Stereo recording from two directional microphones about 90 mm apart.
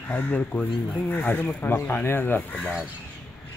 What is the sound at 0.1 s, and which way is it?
Speech, 15° left (ahead or behind).